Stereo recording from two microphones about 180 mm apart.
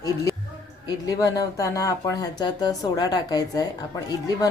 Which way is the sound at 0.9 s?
20° left (ahead or behind).